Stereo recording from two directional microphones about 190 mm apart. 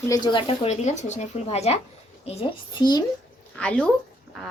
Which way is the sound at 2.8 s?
20° left (ahead or behind).